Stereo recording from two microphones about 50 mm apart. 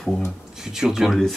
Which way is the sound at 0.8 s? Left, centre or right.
Centre.